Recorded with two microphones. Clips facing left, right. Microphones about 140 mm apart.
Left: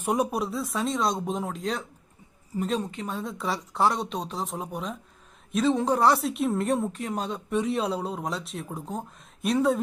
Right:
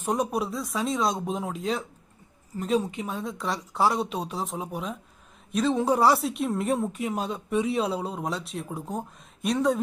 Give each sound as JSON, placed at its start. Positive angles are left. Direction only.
{"t": 0.0, "sound": "speech", "side_deg": 10}